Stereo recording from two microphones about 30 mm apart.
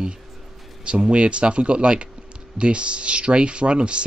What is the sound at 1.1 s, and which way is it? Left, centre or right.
Speech, right.